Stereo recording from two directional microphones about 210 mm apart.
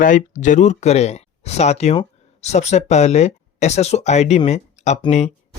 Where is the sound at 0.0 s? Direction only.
40° left (ahead or behind).